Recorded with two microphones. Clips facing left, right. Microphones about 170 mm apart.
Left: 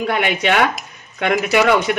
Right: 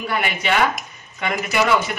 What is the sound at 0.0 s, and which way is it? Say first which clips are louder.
Speech: left 5 dB; 70° left (ahead or behind).